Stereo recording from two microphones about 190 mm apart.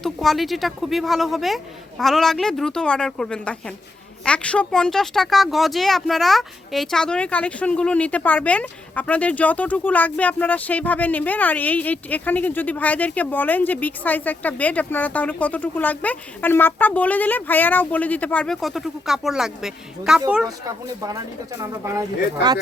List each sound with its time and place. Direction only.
0.0 s a woman's voice: centre (ahead or behind)
21.6 s speech: 15° right (ahead or behind)